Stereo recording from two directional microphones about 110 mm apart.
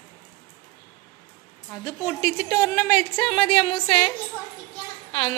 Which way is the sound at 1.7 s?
30° left (ahead or behind).